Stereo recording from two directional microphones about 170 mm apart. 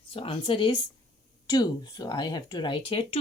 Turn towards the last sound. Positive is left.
turn(degrees=35)  # may be behind; listen again after turning